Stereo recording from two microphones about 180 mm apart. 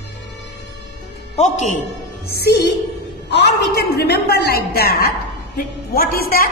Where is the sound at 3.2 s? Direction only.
70° left (ahead or behind).